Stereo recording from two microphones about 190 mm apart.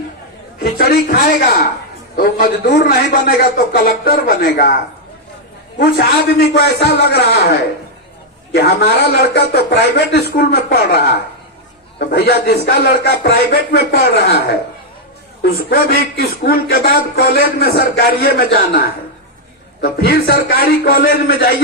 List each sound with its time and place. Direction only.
0.6 s speech: 55° left (ahead or behind)
6.5 s a man's voice: 60° left (ahead or behind)
8.5 s a man's voice: 60° left (ahead or behind)